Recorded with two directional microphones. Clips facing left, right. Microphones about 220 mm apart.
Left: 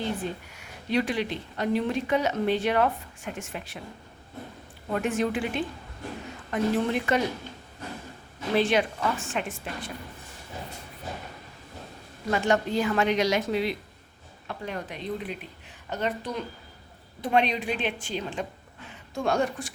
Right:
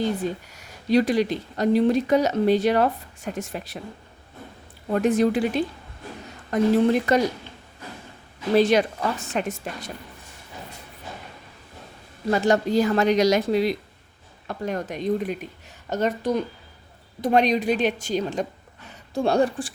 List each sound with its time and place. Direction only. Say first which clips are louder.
0.5 s speech: right 7 dB; 40° right (ahead or behind)
4.9 s speech: right 7 dB; 40° right (ahead or behind)
8.5 s speech: right 5 dB; 40° right (ahead or behind)
12.3 s speech: right 5 dB; 35° right (ahead or behind)